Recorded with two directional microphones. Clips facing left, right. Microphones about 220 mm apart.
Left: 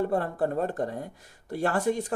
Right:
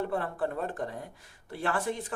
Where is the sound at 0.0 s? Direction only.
40° left (ahead or behind).